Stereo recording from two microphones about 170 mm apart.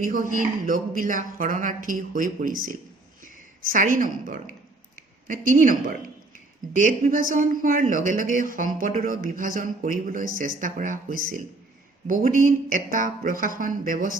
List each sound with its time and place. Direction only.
0.0 s speech: 55° right (ahead or behind)